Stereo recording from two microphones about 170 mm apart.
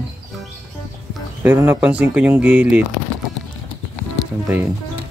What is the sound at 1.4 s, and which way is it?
Speech, 10° right (ahead or behind).